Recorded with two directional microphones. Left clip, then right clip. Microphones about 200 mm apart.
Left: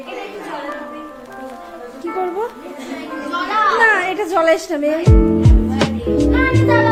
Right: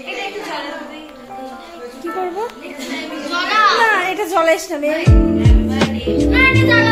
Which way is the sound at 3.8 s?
15° left (ahead or behind).